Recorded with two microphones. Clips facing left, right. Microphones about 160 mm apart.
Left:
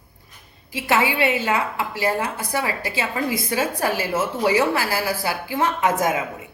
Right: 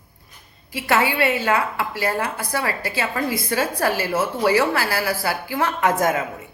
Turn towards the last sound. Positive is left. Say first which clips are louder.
# right 1 dB
turn(degrees=15)  # may be behind; listen again after turning